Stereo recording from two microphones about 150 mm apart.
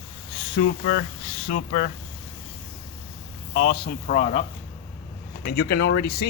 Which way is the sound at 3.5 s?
55° left (ahead or behind).